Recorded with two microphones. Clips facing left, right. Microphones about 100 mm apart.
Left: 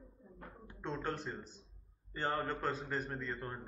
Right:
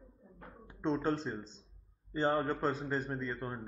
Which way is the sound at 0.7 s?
15° right (ahead or behind).